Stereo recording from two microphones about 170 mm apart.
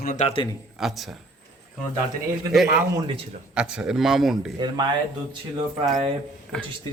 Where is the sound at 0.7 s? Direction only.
Centre (ahead or behind).